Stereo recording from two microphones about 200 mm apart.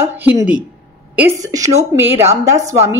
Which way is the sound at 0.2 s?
10° right (ahead or behind).